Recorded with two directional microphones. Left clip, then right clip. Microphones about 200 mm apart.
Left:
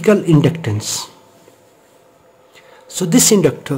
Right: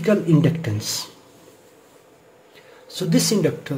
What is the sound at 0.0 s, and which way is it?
Speech, 25° left (ahead or behind).